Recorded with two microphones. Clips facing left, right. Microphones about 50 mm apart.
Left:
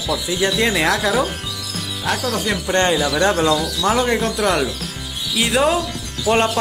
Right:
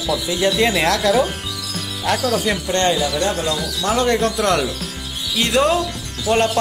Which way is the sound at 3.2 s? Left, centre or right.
Left.